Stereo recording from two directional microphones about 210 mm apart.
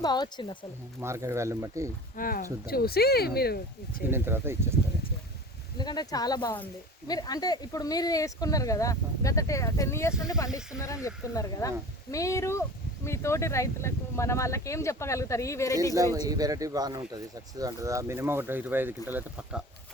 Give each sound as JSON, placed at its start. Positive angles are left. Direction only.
{"t": 0.0, "sound": "speech", "side_deg": 20}
{"t": 1.0, "sound": "speech", "side_deg": -15}
{"t": 2.1, "sound": "speech", "side_deg": 40}
{"t": 4.1, "sound": "speech", "side_deg": -10}
{"t": 5.7, "sound": "speech", "side_deg": 20}
{"t": 16.1, "sound": "speech", "side_deg": -20}